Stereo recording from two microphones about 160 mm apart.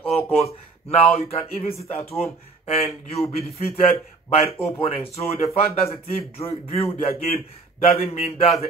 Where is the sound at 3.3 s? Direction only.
40° left (ahead or behind).